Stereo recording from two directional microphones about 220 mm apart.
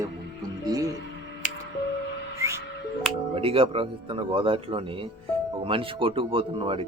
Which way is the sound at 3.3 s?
25° right (ahead or behind).